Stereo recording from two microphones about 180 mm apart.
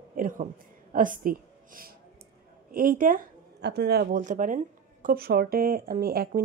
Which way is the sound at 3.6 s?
65° right (ahead or behind).